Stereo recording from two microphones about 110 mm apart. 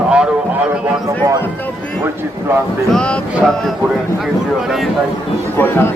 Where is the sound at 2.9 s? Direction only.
10° left (ahead or behind).